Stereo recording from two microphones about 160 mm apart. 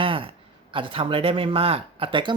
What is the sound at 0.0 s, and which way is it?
Speech, 35° right (ahead or behind).